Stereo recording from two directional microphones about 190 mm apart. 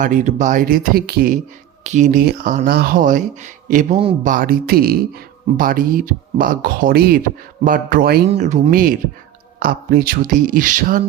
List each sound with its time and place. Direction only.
0.0 s speech: 40° right (ahead or behind)
1.8 s speech: 40° right (ahead or behind)
8.3 s speech: 35° right (ahead or behind)